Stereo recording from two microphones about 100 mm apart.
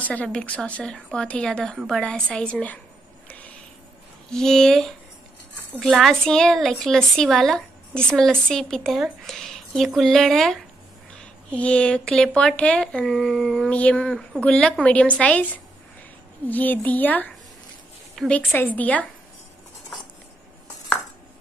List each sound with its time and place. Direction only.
0.0 s speech: 15° left (ahead or behind)
3.3 s a sound: 15° left (ahead or behind)
4.3 s a woman's voice: 5° left (ahead or behind)
18.3 s speech: 15° left (ahead or behind)